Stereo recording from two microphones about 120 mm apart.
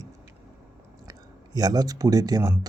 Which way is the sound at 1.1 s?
35° right (ahead or behind).